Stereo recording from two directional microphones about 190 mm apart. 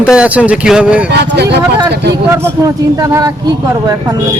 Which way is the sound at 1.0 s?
60° right (ahead or behind).